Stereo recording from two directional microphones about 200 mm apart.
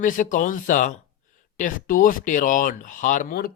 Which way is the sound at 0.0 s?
40° left (ahead or behind).